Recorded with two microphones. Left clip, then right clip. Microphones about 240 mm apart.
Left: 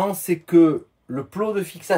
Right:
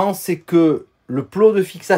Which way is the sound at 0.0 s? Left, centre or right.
Right.